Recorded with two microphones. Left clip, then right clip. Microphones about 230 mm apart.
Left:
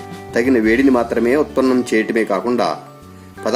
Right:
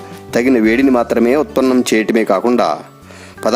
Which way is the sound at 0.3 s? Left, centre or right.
Right.